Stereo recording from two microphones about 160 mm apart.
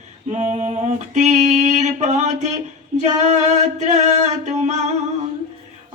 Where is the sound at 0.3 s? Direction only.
45° right (ahead or behind).